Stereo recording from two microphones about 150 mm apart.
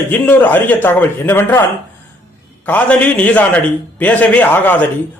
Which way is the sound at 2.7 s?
10° left (ahead or behind).